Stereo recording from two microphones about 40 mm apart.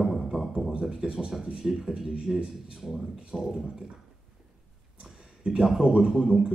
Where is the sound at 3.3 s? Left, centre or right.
Centre.